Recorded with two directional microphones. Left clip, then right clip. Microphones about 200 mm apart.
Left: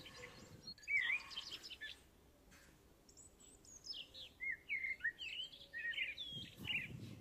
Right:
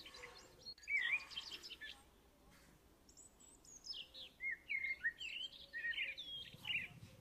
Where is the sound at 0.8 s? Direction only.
Centre (ahead or behind).